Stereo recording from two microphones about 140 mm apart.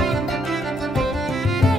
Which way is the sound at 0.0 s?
Centre (ahead or behind).